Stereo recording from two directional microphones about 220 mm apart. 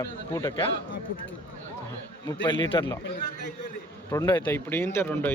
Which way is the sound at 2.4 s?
20° left (ahead or behind).